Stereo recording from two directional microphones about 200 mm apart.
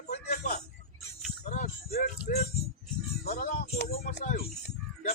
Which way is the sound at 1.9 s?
50° left (ahead or behind).